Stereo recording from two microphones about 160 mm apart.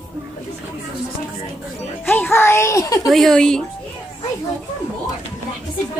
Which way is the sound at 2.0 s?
15° left (ahead or behind).